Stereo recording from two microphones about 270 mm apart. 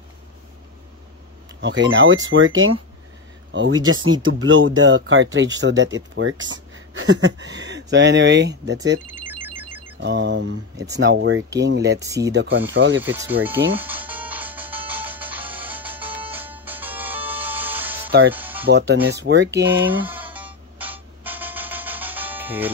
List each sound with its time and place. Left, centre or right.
1.6 s speech: right
9.1 s telephone bell ringing: centre
9.9 s speech: right
12.0 s speech: centre
12.3 s speech: right
13.0 s music: centre
18.7 s speech: right
19.9 s music: centre